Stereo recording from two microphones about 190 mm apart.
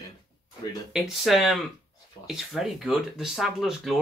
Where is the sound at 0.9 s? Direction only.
Centre (ahead or behind).